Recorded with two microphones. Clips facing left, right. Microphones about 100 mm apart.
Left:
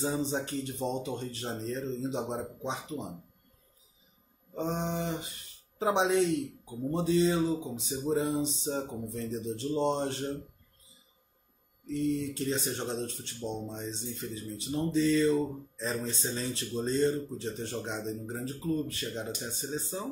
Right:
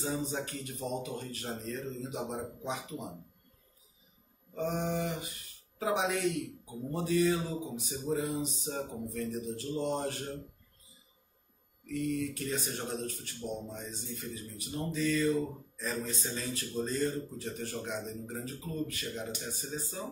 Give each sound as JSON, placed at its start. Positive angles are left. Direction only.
{"t": 0.0, "sound": "speech", "side_deg": 25}
{"t": 4.6, "sound": "speech", "side_deg": 25}
{"t": 11.8, "sound": "speech", "side_deg": 25}